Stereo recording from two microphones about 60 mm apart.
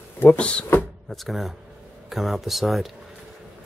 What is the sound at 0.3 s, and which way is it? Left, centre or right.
Speech, centre.